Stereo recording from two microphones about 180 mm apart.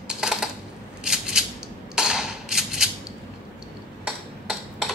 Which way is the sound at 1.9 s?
5° right (ahead or behind).